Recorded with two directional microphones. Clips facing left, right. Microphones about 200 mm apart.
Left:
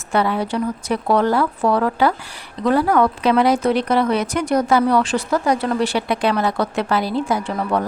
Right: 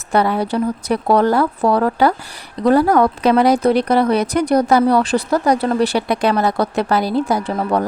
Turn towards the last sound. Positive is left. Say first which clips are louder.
# right 2 dB
turn(degrees=-40)  # may be behind; listen again after turning